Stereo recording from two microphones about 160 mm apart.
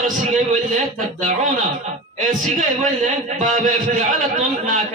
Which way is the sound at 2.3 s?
55° right (ahead or behind).